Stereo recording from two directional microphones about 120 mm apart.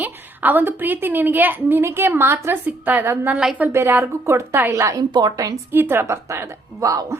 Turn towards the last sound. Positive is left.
turn(degrees=-30)  # may be behind; listen again after turning